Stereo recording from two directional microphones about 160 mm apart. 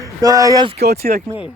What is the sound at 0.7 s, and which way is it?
Speech, 90° right.